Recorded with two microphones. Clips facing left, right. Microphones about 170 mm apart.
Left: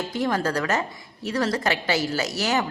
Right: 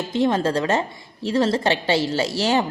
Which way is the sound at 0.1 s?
25° right (ahead or behind).